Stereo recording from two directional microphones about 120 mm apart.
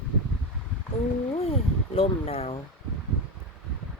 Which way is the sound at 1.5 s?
55° left (ahead or behind).